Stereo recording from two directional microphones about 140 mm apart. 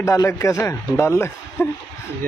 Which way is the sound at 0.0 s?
20° left (ahead or behind).